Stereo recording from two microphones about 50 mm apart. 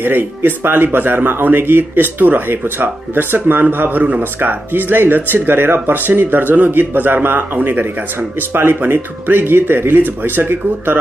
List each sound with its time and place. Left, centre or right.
0.0 s a man's voice: right